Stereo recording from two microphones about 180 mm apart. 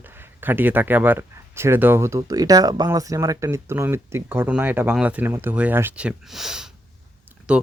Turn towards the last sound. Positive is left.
turn(degrees=-5)  # may be behind; listen again after turning